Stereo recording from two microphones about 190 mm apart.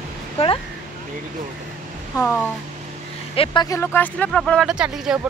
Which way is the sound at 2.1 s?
10° left (ahead or behind).